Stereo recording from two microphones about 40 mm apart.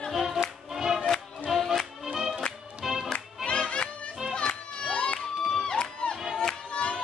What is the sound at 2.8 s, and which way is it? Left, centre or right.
Music, centre.